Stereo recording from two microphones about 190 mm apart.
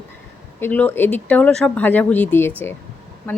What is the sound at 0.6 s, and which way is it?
Speech, 10° left (ahead or behind).